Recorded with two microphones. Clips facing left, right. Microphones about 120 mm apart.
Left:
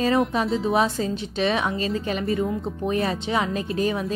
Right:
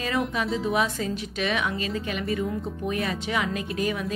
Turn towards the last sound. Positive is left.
turn(degrees=30)  # may be behind; listen again after turning